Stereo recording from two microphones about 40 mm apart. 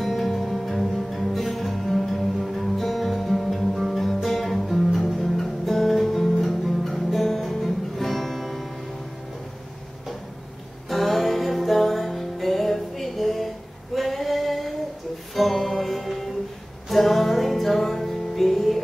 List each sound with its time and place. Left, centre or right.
0.0 s music: centre
10.9 s music: centre
13.9 s female singing: centre
15.3 s music: centre